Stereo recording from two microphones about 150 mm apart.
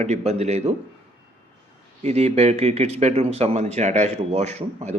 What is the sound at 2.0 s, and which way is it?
Speech, 45° right (ahead or behind).